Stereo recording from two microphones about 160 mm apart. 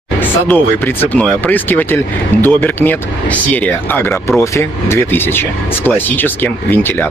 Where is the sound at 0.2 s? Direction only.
10° left (ahead or behind).